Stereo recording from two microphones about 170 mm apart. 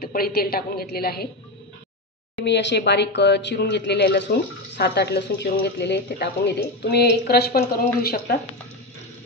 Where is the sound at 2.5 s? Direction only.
90° left; by 8.3 s 65° left (ahead or behind).